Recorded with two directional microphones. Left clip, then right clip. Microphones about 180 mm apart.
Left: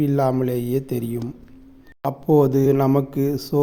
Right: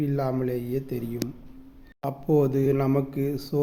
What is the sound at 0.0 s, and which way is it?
A man's voice, 35° left (ahead or behind).